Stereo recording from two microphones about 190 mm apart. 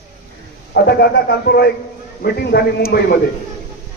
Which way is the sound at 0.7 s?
55° left (ahead or behind).